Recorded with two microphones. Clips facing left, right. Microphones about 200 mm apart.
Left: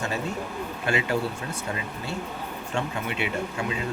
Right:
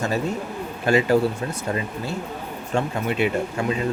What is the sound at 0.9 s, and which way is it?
Speech, 40° right (ahead or behind).